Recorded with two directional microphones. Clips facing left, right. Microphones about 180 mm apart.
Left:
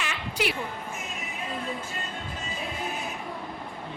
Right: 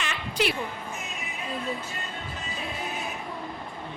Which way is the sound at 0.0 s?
10° left (ahead or behind).